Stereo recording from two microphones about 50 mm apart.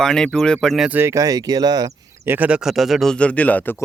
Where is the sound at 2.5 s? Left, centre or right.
Centre.